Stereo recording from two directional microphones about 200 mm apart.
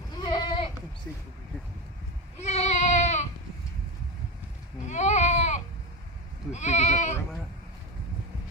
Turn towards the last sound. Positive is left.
turn(degrees=35)  # may be behind; listen again after turning